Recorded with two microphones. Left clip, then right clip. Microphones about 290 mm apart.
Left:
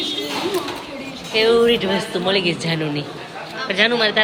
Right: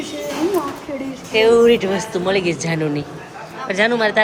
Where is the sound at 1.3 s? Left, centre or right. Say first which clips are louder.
Right 3 dB; centre.